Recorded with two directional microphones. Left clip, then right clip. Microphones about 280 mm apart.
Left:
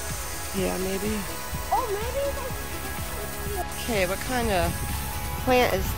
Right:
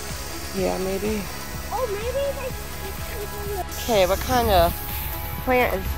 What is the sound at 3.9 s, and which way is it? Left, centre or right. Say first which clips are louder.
Speech: right 8 dB; centre.